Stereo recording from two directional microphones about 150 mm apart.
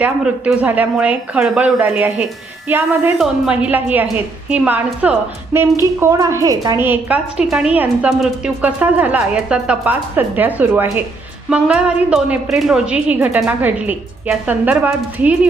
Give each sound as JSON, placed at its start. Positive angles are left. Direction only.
{"t": 0.0, "sound": "a woman's voice", "side_deg": -10}
{"t": 6.0, "sound": "a woman's voice", "side_deg": -20}
{"t": 6.7, "sound": "a woman's voice", "side_deg": -15}